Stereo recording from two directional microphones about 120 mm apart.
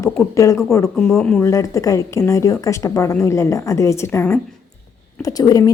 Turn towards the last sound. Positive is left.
turn(degrees=30)  # may be behind; listen again after turning